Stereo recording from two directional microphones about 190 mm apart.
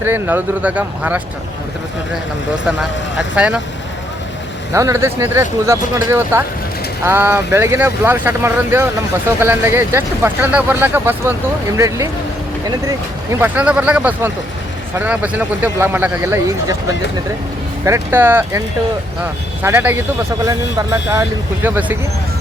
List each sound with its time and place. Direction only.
0.0 s speech: 10° right (ahead or behind)
3.2 s speech: 5° right (ahead or behind)
4.7 s speech: 15° right (ahead or behind)
13.4 s speech: 5° right (ahead or behind)
17.8 s speech: 15° right (ahead or behind)
19.6 s speech: 10° right (ahead or behind)